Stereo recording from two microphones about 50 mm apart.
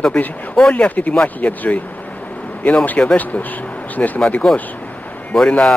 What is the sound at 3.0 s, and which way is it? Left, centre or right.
Speech, left.